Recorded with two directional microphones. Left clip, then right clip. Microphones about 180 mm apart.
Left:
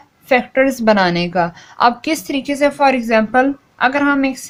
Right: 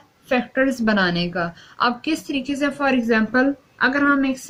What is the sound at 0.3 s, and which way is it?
A woman's voice, 35° left (ahead or behind).